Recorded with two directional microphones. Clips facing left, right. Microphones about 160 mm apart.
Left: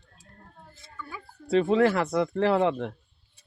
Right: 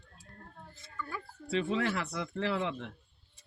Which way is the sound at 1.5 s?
50° left (ahead or behind).